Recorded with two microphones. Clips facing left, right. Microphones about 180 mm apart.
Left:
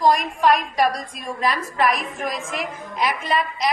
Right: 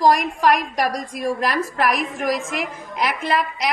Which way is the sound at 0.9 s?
75° right (ahead or behind).